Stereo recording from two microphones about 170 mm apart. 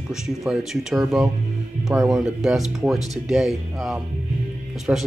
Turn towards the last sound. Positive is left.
turn(degrees=-5)  # may be behind; listen again after turning